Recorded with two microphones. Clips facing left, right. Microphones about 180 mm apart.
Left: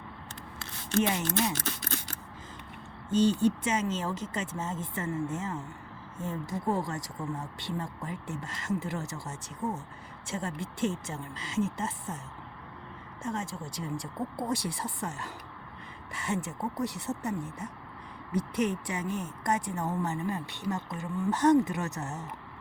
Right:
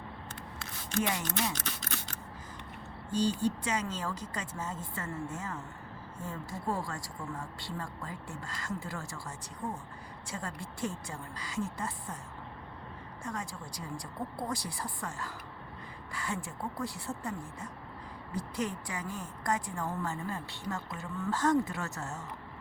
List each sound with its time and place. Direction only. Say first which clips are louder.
0.6 s scissors: left 5 dB; 30° left (ahead or behind)
3.1 s speech: left 5 dB; 25° left (ahead or behind)
13.2 s speech: left 5 dB; 25° left (ahead or behind)